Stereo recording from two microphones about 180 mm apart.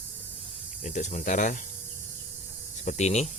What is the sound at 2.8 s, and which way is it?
Speech, 40° left (ahead or behind).